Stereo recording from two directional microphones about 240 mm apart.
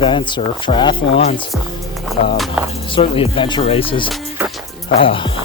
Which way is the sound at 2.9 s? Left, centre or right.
Left.